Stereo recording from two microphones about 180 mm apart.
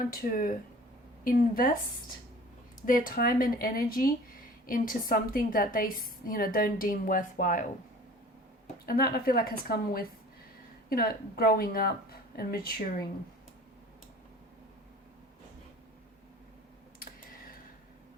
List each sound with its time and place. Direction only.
0.0 s a woman's voice: 55° left (ahead or behind)
2.8 s a woman's voice: 50° left (ahead or behind)
8.9 s a woman's voice: 60° left (ahead or behind)